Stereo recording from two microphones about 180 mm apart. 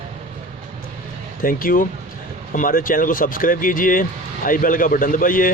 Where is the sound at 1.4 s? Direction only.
50° left (ahead or behind).